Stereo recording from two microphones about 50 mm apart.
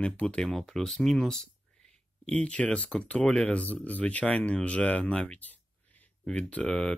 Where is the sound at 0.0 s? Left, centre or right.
Left.